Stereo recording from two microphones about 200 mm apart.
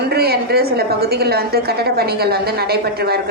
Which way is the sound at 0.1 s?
50° right (ahead or behind).